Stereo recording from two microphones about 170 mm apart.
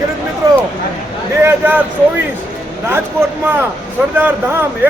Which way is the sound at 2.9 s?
10° right (ahead or behind).